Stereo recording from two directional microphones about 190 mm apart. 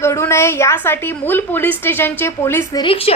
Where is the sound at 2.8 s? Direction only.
30° left (ahead or behind).